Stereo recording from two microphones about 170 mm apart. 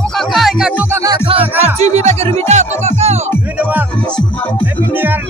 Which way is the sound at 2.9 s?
40° right (ahead or behind).